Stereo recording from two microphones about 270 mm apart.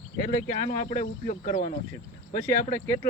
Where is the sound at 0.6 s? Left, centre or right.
Left.